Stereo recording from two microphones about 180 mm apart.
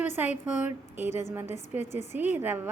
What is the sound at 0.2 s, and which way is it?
Speech, 10° right (ahead or behind).